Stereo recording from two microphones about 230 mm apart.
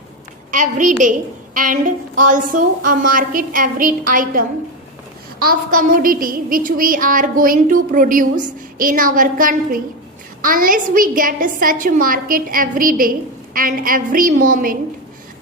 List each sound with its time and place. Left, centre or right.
0.5 s child singing: right